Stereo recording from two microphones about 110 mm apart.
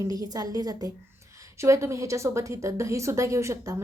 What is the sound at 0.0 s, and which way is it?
A woman's voice, 35° right (ahead or behind).